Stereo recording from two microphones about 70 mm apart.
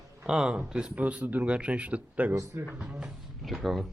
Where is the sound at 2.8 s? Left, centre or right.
Centre.